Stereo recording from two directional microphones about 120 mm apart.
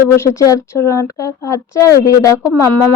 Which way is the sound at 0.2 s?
25° left (ahead or behind).